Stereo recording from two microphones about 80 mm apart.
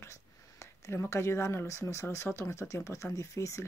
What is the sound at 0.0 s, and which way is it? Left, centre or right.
Speech, left.